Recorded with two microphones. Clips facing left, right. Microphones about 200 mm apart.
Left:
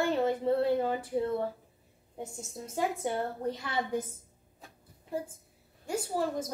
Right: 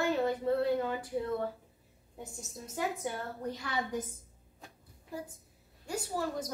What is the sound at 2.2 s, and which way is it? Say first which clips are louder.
Speech: left 5 dB; 25° left (ahead or behind).